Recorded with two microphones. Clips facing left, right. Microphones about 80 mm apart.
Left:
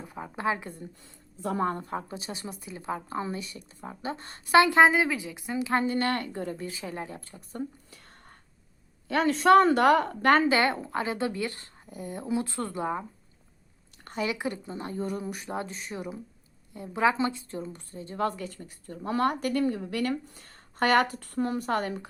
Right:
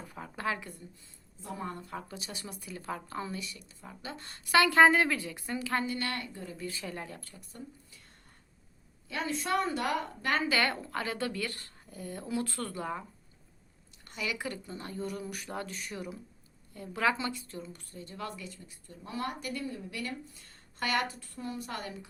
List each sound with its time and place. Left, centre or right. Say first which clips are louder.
0.1 s a woman's voice: left 5 dB; left
1.0 s speech: left 12 dB; left
1.7 s a woman's voice: left 7 dB; left
4.9 s speech: left 1 dB; centre
5.6 s a woman's voice: left 7 dB; left
6.6 s a woman's voice: left 3 dB; left
7.9 s whispering: left 6 dB; left
9.0 s a woman's voice: left 12 dB; left
10.5 s a woman's voice: left 5 dB; left
14.0 s a sound: left 6 dB; left
14.3 s a woman's voice: left 5 dB; left